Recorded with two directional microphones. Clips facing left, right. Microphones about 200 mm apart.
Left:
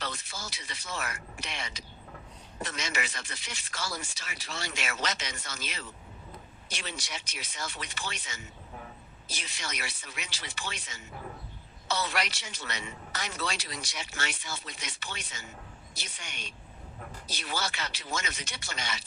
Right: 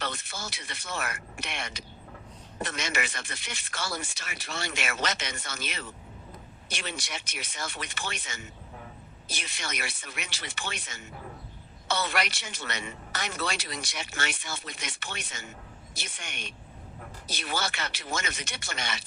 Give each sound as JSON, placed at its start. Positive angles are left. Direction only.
{"t": 0.0, "sound": "a man's voice", "side_deg": -55}